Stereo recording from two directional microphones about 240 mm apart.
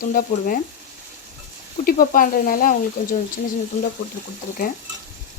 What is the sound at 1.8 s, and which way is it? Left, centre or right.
Speech, left.